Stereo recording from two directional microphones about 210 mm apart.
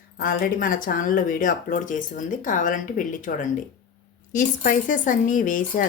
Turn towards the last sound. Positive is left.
turn(degrees=40)  # may be behind; listen again after turning